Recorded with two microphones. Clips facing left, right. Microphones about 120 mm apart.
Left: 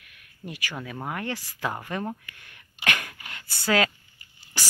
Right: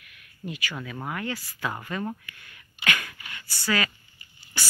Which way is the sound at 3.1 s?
50° left (ahead or behind).